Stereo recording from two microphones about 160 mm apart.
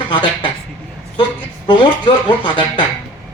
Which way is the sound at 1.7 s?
30° left (ahead or behind).